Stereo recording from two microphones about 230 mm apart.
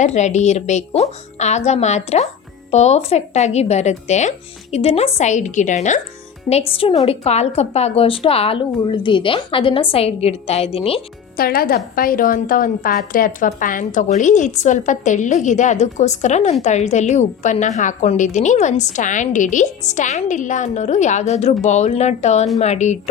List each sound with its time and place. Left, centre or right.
0.0 s a woman's voice: left
11.3 s a woman's voice: left